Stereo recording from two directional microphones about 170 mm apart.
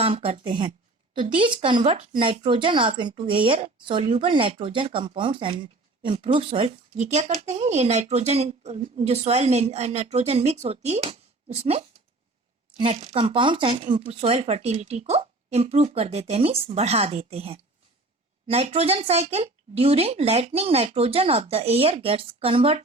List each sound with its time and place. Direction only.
0.0 s speech: 35° right (ahead or behind)